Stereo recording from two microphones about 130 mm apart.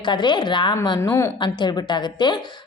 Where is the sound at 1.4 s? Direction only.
35° left (ahead or behind).